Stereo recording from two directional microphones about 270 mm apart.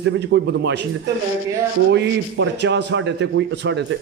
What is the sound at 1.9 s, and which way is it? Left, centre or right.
A man's voice, right.